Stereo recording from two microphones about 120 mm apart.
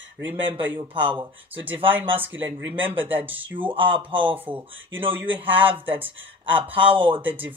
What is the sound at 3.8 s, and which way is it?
Speech, 45° right (ahead or behind).